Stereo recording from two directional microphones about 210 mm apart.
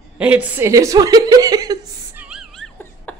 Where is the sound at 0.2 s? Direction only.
5° right (ahead or behind).